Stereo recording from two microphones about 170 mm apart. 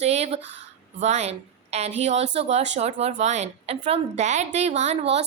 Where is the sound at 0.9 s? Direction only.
40° right (ahead or behind).